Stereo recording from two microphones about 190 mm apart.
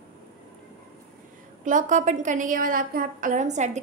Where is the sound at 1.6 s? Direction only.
40° right (ahead or behind).